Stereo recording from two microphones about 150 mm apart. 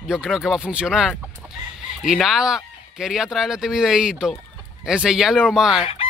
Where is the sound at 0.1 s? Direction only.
5° right (ahead or behind).